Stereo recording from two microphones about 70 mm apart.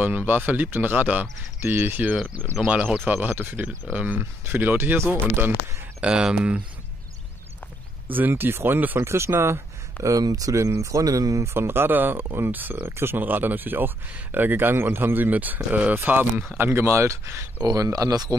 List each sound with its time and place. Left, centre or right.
0.0 s speech: right
3.6 s speech: centre
4.2 s speech: right
5.9 s speech: centre
8.1 s speech: right
10.0 s speech: right
11.4 s speech: right
17.6 s speech: right